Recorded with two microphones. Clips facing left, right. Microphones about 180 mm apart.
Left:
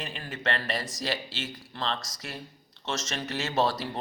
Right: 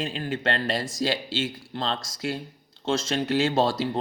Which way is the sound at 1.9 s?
30° right (ahead or behind).